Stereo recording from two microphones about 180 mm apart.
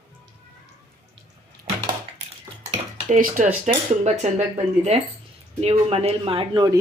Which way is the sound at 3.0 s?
45° right (ahead or behind).